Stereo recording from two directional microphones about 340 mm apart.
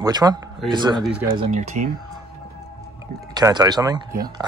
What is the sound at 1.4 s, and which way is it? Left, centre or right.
Speech, right.